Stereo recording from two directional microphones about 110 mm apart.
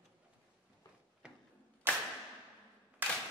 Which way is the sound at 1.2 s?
10° right (ahead or behind).